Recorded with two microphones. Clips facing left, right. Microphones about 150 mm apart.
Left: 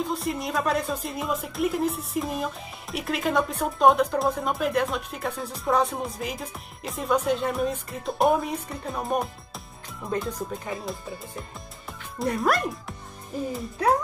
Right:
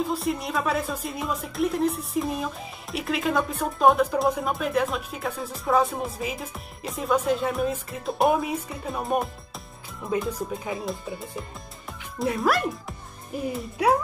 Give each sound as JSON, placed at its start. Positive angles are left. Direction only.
{"t": 0.0, "sound": "speech", "side_deg": 0}